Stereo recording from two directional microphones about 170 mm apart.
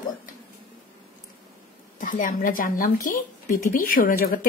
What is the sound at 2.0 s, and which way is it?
Speech, 50° left (ahead or behind).